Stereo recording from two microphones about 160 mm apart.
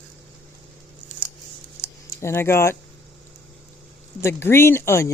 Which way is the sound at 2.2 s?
15° left (ahead or behind).